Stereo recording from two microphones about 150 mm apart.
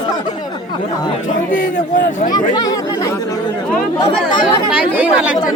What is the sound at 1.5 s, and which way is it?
Speech, 65° left (ahead or behind).